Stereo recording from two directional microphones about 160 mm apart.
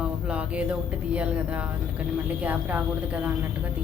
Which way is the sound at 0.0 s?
5° right (ahead or behind).